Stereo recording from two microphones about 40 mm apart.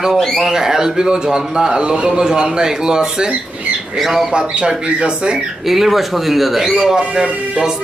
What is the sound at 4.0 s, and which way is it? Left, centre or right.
Speech, centre.